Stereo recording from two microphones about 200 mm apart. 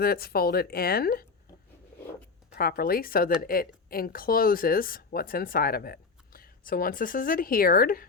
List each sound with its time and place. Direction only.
0.0 s speech: 50° left (ahead or behind)
2.6 s speech: 50° left (ahead or behind)